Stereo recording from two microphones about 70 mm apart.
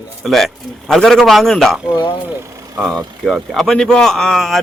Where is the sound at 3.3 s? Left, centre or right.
Centre.